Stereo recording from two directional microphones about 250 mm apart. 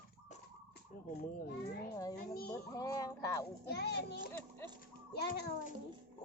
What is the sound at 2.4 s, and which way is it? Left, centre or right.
A child's voice, centre.